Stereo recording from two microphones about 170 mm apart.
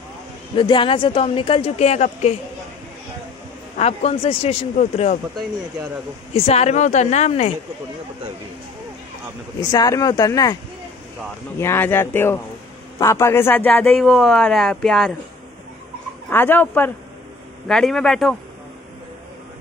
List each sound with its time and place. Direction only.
0.6 s speech: 30° left (ahead or behind)
3.7 s speech: 40° left (ahead or behind)
6.3 s speech: 35° left (ahead or behind)
9.6 s a man's voice: 20° left (ahead or behind); by 15.1 s centre (ahead or behind)
16.3 s a man's voice: 10° left (ahead or behind)